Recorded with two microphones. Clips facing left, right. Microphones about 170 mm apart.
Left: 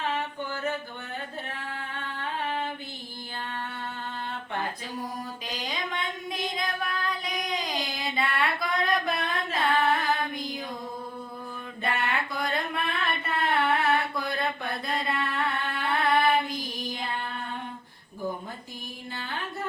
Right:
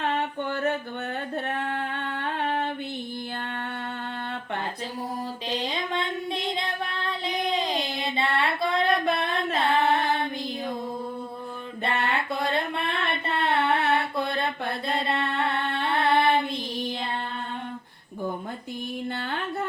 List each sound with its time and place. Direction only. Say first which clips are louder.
1.5 s singing: right 8 dB; 60° right (ahead or behind)
5.5 s female singing: right 5 dB; 30° right (ahead or behind)
11.8 s a sound: right 2 dB; 30° right (ahead or behind)
13.2 s mantra: right 2 dB; 25° right (ahead or behind)
19.1 s music: right 5 dB; 60° right (ahead or behind)